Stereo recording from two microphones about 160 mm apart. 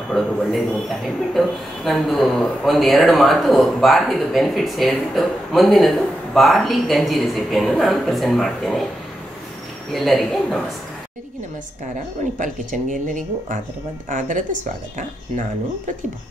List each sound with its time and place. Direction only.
0.1 s speech: centre (ahead or behind)
9.9 s speech: centre (ahead or behind)
12.4 s speech: 55° right (ahead or behind)